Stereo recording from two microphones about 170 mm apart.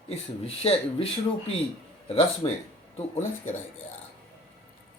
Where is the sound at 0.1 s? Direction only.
35° left (ahead or behind).